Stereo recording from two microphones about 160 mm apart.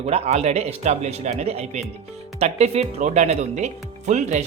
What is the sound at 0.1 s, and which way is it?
Speech, 45° right (ahead or behind).